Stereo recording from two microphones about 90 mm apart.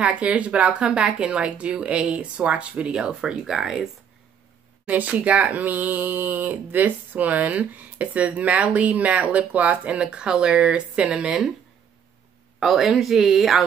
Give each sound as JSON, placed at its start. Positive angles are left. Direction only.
{"t": 0.0, "sound": "speech", "side_deg": -15}
{"t": 4.8, "sound": "speech", "side_deg": -15}
{"t": 12.5, "sound": "speech", "side_deg": -5}